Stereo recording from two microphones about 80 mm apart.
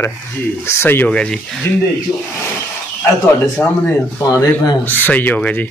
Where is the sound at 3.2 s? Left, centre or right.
Left.